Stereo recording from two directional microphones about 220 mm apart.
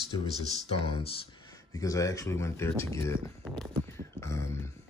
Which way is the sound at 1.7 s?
15° left (ahead or behind).